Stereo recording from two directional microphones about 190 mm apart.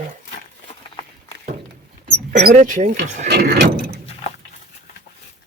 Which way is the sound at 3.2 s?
60° right (ahead or behind).